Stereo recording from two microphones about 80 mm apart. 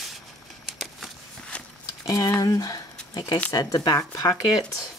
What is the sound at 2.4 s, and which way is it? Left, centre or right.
Speech, left.